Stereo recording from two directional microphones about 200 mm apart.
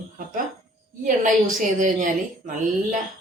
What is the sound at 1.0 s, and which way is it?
Speech, 40° right (ahead or behind).